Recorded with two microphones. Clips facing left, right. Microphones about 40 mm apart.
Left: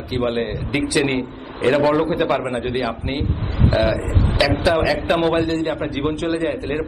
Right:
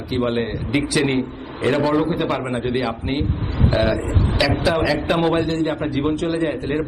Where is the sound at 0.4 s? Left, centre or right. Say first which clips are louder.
Even; centre.